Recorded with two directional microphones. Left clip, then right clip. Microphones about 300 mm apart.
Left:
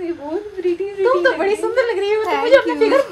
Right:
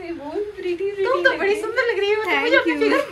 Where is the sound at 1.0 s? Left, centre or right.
Left.